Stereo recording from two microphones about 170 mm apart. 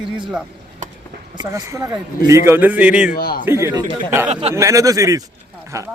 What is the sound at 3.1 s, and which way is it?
Speech, 60° left (ahead or behind).